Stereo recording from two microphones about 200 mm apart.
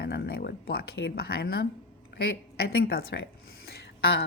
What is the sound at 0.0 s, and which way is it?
A woman's voice, 55° left (ahead or behind).